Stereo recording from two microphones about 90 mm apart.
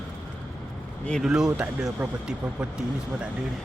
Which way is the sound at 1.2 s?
5° right (ahead or behind).